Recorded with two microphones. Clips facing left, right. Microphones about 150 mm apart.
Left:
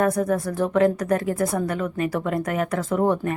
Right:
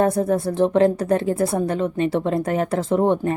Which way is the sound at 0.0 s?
30° right (ahead or behind).